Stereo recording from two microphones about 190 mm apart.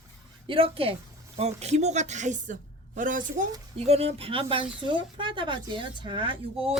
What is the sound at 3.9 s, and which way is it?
Speech, 35° right (ahead or behind).